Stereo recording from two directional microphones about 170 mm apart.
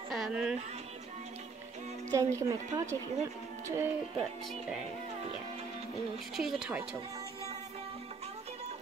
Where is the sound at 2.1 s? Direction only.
20° right (ahead or behind).